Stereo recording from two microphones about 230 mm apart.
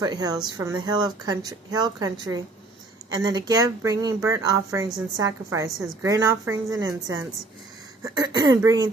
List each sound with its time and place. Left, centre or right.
0.0 s a woman's voice: centre